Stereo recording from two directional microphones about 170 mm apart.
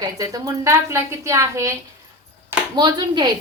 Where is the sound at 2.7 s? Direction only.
25° right (ahead or behind).